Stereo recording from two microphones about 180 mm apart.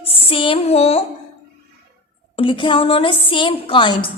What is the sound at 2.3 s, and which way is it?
Music, 30° left (ahead or behind).